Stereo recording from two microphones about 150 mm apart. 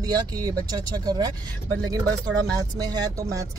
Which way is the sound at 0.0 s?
25° right (ahead or behind).